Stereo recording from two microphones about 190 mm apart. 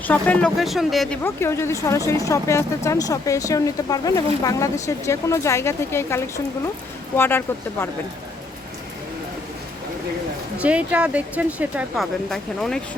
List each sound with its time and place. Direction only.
0.1 s speech: 5° left (ahead or behind)
1.2 s speech: 15° left (ahead or behind)
10.6 s speech: 5° right (ahead or behind)